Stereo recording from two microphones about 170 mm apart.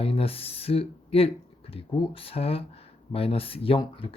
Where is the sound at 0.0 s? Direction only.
35° left (ahead or behind).